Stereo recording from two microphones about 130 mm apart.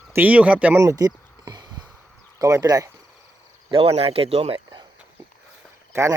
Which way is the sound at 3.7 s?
45° right (ahead or behind).